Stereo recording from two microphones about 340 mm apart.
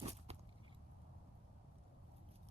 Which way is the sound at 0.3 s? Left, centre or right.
Centre.